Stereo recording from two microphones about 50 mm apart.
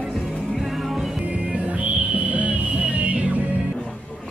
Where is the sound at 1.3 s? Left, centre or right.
Right.